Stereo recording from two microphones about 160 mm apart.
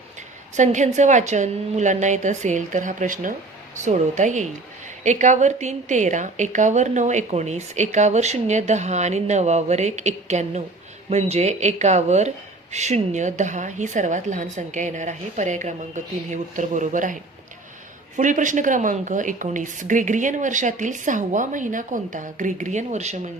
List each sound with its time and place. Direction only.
0.5 s a woman's voice: 50° right (ahead or behind)
18.2 s a woman's voice: 50° right (ahead or behind)